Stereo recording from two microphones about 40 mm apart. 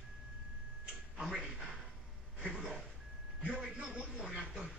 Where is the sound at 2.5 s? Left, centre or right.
Centre.